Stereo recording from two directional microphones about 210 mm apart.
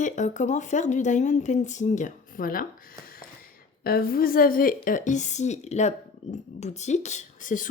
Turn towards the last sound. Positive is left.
turn(degrees=40)  # may be behind; listen again after turning